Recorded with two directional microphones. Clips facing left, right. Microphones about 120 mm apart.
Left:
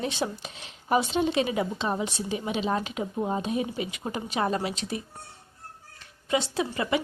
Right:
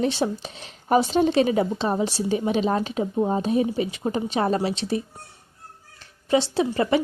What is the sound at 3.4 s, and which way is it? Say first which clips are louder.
Speech: right 7 dB; 35° right (ahead or behind).